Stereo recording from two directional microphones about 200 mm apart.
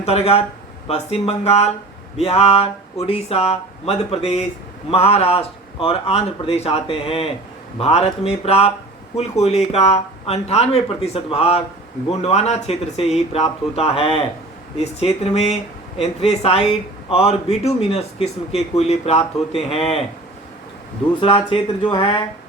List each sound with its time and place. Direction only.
0.0 s a man's voice: 30° left (ahead or behind)
21.2 s a man's voice: 25° left (ahead or behind)